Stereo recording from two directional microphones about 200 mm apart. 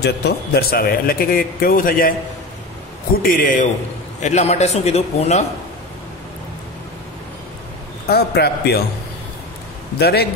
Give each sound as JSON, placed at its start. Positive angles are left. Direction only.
{"t": 0.0, "sound": "speech", "side_deg": 55}
{"t": 3.2, "sound": "a man's voice", "side_deg": 45}
{"t": 8.1, "sound": "speech", "side_deg": 55}
{"t": 9.9, "sound": "speech", "side_deg": 50}